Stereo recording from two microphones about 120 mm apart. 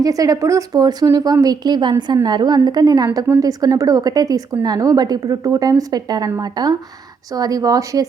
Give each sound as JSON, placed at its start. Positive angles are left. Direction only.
{"t": 0.0, "sound": "a woman's voice", "side_deg": -30}